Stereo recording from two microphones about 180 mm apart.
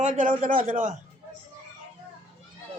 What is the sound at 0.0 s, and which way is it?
Speech, 45° right (ahead or behind).